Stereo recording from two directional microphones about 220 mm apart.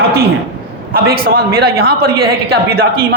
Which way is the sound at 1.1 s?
45° right (ahead or behind).